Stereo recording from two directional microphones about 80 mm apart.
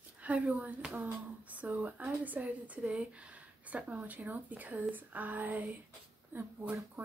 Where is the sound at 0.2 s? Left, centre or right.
Centre.